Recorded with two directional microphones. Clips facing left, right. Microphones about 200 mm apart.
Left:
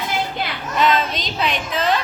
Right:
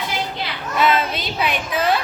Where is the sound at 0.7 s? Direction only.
10° right (ahead or behind).